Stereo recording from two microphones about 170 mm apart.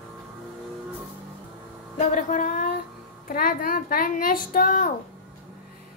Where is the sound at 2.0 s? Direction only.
50° left (ahead or behind).